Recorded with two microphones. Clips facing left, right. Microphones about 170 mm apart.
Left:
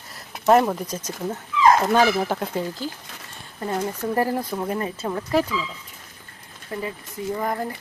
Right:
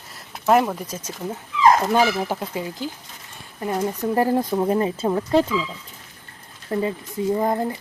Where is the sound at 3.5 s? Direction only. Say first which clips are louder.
Right 2 dB; 15° right (ahead or behind).